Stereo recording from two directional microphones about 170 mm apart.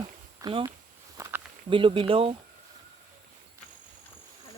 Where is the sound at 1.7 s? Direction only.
30° right (ahead or behind).